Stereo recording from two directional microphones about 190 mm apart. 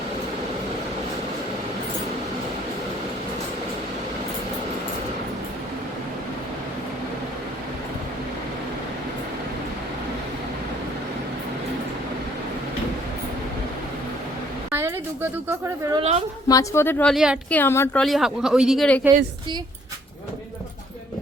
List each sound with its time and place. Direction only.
14.7 s a woman's voice: 10° right (ahead or behind)
16.0 s a woman's voice: 35° right (ahead or behind)
16.5 s speech: 15° left (ahead or behind); by 17.3 s centre (ahead or behind)
17.5 s speech: 10° left (ahead or behind)
18.0 s speech: centre (ahead or behind)